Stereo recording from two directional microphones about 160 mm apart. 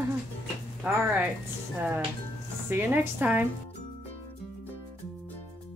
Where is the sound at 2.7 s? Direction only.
10° right (ahead or behind).